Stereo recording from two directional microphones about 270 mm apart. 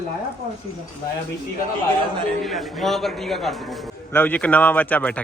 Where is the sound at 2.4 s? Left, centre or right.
Centre.